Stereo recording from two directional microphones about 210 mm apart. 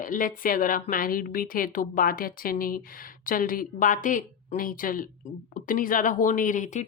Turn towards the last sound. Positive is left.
turn(degrees=35)  # may be behind; listen again after turning